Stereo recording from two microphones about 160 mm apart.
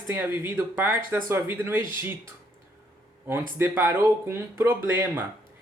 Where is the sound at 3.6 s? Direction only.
15° right (ahead or behind).